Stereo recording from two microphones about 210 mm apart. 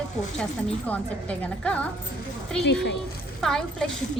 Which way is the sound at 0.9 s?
5° left (ahead or behind).